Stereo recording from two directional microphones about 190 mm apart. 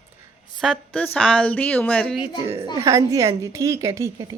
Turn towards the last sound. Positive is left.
turn(degrees=-15)  # may be behind; listen again after turning